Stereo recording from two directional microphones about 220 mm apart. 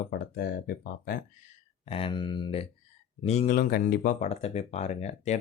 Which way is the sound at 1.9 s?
25° left (ahead or behind).